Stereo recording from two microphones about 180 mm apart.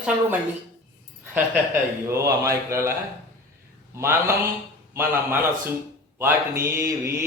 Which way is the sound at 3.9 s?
15° right (ahead or behind).